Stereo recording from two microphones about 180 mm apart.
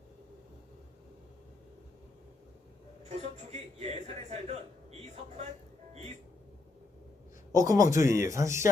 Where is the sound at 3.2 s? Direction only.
35° right (ahead or behind).